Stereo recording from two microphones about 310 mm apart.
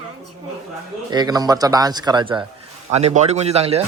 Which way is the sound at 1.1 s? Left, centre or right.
Centre.